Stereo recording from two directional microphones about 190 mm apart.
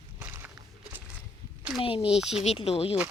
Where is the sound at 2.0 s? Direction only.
5° right (ahead or behind).